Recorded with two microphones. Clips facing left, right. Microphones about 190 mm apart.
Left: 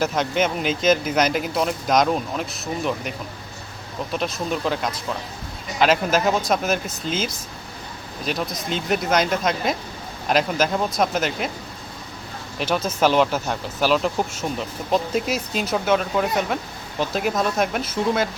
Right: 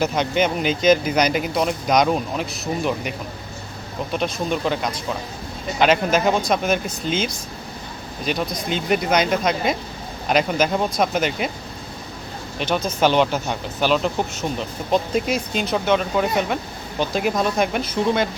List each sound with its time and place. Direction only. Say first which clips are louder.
0.0 s speech: right 1 dB; centre (ahead or behind)
12.5 s speech: right 1 dB; 5° left (ahead or behind)